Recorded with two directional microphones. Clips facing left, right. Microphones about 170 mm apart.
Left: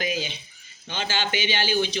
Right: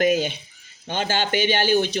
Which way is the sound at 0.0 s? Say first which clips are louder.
Right 9 dB; 55° right (ahead or behind).